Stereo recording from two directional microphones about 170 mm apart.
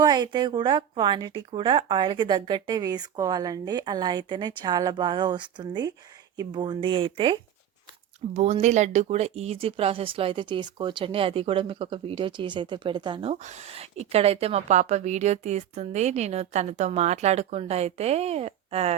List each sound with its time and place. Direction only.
0.0 s speech: 25° right (ahead or behind)
8.3 s a woman's voice: 40° right (ahead or behind)
13.4 s a woman's voice: 40° right (ahead or behind)